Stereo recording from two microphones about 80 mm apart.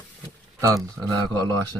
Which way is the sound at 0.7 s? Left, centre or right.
Right.